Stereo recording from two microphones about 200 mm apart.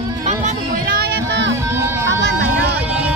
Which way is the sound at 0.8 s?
55° right (ahead or behind).